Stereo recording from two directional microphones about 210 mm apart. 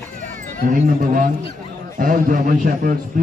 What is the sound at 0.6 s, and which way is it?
A man's voice, 40° right (ahead or behind).